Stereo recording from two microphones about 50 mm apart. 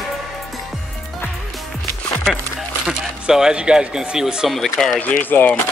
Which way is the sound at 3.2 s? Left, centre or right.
Centre.